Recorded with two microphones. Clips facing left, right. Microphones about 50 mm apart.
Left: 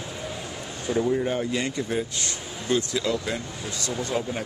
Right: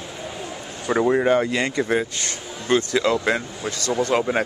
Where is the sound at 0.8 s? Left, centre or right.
Right.